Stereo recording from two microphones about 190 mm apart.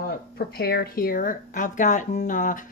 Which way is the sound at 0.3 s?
55° left (ahead or behind).